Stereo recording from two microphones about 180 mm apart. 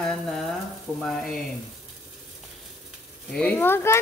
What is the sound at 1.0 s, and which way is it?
Speech, centre (ahead or behind).